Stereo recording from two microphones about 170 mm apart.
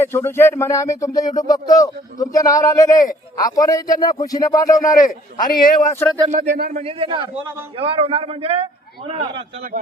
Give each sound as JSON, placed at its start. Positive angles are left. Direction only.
{"t": 0.0, "sound": "a man's voice", "side_deg": 15}
{"t": 4.8, "sound": "a man's voice", "side_deg": 50}
{"t": 6.2, "sound": "speech", "side_deg": -45}
{"t": 6.7, "sound": "a man's voice", "side_deg": -35}